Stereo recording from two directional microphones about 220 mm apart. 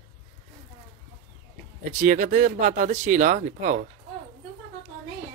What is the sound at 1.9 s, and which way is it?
Speech, 35° right (ahead or behind).